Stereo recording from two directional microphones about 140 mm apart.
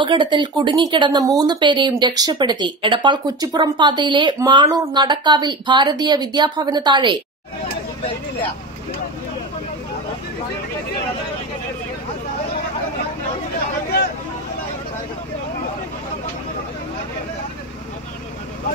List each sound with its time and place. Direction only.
0.0 s speech: 35° right (ahead or behind)